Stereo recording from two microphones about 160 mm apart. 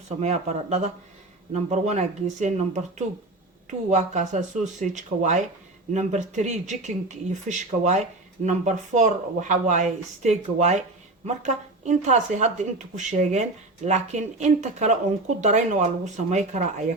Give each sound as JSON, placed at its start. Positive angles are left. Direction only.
{"t": 0.2, "sound": "speech", "side_deg": -45}